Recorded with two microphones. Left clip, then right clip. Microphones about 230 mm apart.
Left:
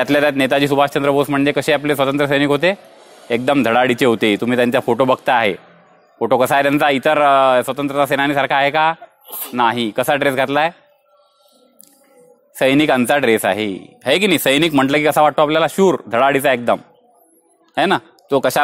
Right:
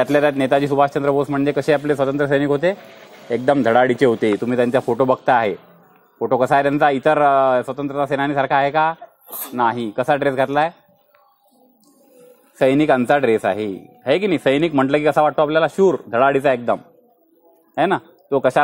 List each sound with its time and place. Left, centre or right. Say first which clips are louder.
0.0 s speech: left 1 dB; left
12.5 s speech: left 1 dB; left